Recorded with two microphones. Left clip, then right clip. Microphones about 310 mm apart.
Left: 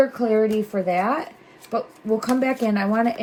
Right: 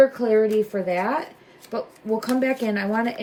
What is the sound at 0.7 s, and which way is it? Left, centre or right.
Speech, centre.